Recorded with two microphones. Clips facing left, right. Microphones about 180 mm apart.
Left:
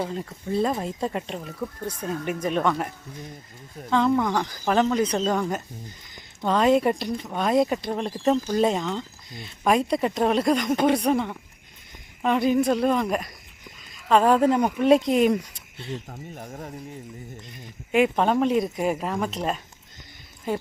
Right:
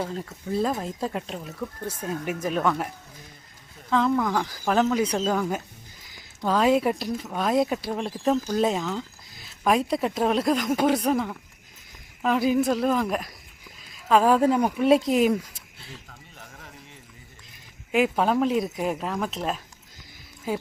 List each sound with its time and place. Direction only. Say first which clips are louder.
0.0 s speech: left 1 dB; centre (ahead or behind)
16.0 s speech: left 10 dB; 45° left (ahead or behind)
17.9 s speech: left 1 dB; centre (ahead or behind)